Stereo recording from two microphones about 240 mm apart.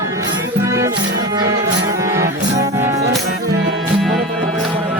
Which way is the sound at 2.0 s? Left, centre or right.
Centre.